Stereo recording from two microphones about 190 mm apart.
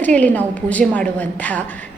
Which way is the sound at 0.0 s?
10° left (ahead or behind).